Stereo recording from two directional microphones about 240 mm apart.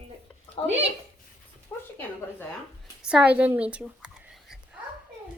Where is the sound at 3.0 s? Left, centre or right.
Centre.